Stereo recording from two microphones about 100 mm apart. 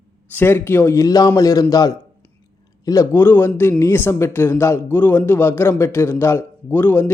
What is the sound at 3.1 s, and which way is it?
A man's voice, 20° left (ahead or behind).